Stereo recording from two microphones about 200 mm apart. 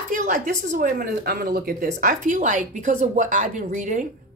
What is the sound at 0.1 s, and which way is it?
A woman's voice, 40° right (ahead or behind).